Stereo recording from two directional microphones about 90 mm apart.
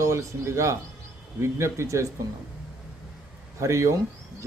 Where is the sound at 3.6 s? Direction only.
35° right (ahead or behind).